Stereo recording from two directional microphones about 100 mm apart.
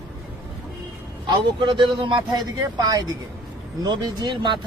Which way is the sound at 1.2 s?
55° right (ahead or behind).